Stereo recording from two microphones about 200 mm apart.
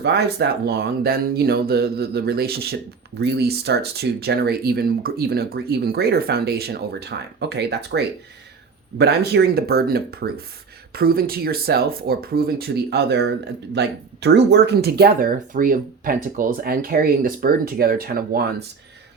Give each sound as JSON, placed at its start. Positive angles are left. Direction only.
{"t": 0.0, "sound": "speech", "side_deg": -55}